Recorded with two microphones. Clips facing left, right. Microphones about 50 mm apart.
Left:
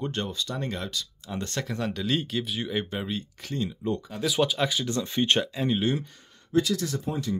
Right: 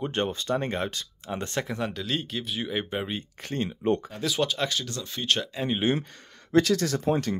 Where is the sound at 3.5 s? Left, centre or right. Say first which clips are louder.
Right 3 dB; right.